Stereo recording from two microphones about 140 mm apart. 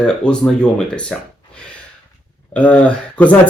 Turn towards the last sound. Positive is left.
turn(degrees=10)  # may be behind; listen again after turning